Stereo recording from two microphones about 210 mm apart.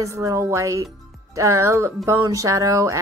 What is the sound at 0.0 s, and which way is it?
Speech, 15° right (ahead or behind).